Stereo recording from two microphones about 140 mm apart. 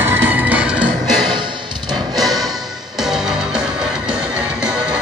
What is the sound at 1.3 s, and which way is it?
Music, 30° right (ahead or behind).